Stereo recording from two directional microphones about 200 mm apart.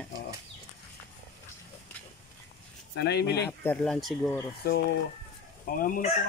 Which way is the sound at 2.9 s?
55° left (ahead or behind).